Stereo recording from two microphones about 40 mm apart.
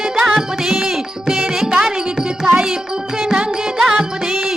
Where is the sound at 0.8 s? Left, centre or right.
Centre.